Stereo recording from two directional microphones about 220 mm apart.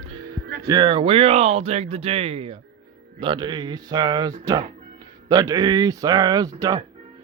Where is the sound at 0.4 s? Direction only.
45° right (ahead or behind).